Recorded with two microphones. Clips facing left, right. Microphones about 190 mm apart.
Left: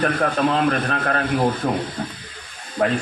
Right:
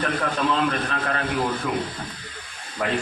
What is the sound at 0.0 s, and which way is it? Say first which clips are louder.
Speech: left 5 dB; 50° left (ahead or behind).